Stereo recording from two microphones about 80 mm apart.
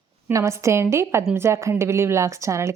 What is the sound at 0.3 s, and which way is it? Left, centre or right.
A woman's voice, right.